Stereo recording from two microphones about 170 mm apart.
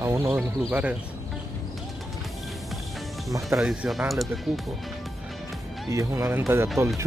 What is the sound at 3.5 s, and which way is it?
Speech, 5° right (ahead or behind).